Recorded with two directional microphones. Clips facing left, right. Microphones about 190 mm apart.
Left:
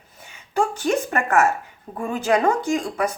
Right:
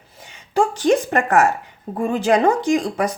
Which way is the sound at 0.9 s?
35° right (ahead or behind).